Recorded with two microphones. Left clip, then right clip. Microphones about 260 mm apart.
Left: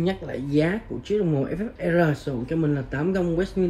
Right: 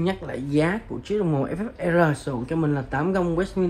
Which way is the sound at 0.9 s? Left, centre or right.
Right.